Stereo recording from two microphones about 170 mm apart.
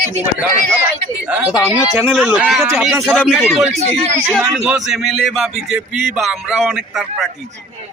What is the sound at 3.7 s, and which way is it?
Speech, 40° right (ahead or behind).